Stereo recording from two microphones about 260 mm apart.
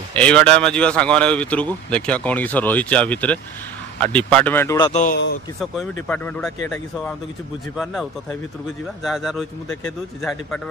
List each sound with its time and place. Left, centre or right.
0.1 s speech: centre
4.9 s speech: left
6.0 s speech: centre
7.7 s speech: centre